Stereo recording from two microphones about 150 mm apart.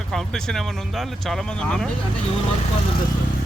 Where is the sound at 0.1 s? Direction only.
5° left (ahead or behind).